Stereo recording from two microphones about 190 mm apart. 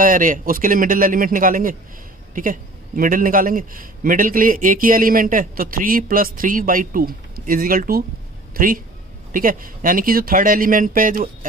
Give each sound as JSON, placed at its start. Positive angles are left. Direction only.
{"t": 0.0, "sound": "a man's voice", "side_deg": -45}